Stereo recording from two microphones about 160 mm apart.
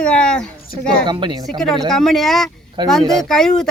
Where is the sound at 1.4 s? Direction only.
Centre (ahead or behind).